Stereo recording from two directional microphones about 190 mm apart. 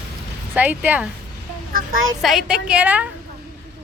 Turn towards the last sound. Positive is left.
turn(degrees=-5)  # may be behind; listen again after turning